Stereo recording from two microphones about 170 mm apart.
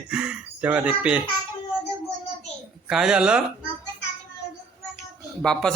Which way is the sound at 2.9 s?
5° right (ahead or behind).